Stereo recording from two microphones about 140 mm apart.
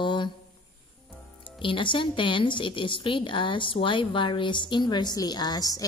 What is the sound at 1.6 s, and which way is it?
A woman's voice, 35° left (ahead or behind).